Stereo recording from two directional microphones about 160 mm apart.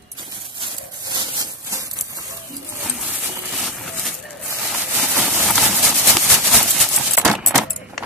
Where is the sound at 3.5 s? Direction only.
Centre (ahead or behind).